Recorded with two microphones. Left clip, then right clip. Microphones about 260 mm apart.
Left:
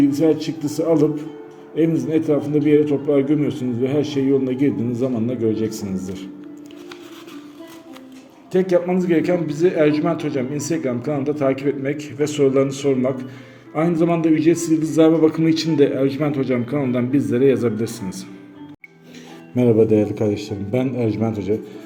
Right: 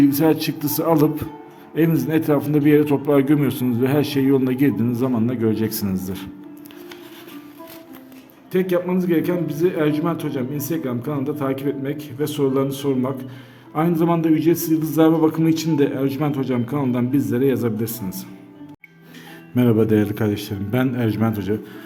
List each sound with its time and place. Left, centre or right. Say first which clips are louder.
0.0 s a man's voice: even; right
8.5 s a man's voice: left 3 dB; centre
19.5 s a man's voice: left 3 dB; right